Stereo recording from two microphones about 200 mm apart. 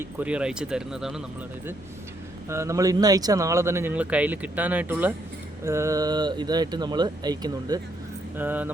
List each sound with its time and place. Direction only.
0.0 s speech: 5° right (ahead or behind)
2.5 s speech: 15° right (ahead or behind)
8.4 s speech: 10° right (ahead or behind)